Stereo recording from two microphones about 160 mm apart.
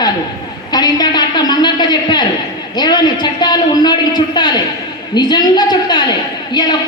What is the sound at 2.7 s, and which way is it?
A woman's voice, 25° left (ahead or behind).